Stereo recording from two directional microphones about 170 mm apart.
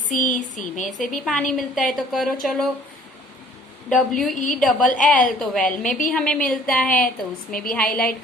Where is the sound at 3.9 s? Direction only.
5° left (ahead or behind).